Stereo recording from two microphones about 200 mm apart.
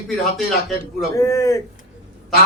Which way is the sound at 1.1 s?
15° left (ahead or behind).